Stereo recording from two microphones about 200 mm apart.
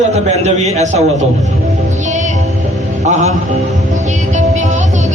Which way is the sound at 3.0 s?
35° right (ahead or behind).